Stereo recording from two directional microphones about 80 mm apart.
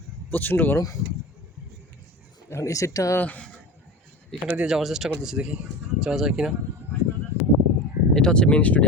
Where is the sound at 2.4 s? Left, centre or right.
Left.